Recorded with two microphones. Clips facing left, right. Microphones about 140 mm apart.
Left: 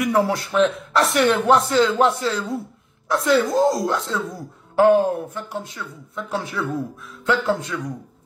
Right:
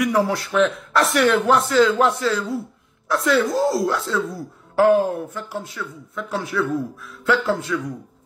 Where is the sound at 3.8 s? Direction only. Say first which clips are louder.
Right 1 dB; 20° left (ahead or behind).